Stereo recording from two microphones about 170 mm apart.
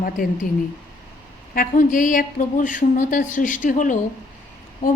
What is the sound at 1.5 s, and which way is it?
Speech, 50° left (ahead or behind).